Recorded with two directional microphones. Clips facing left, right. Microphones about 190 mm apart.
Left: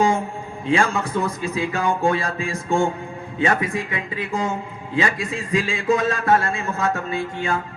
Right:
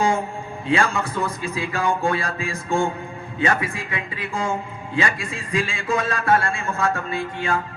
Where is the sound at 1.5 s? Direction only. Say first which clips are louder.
Left 1 dB; 20° left (ahead or behind).